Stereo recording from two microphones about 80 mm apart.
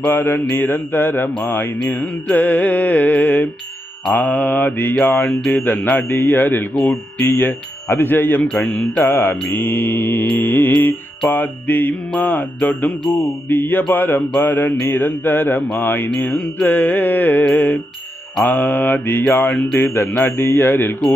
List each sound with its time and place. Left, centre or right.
0.0 s speech: left
8.5 s music: centre
9.0 s speech: left